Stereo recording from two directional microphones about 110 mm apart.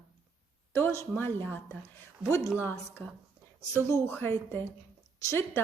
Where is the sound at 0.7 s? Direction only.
25° left (ahead or behind).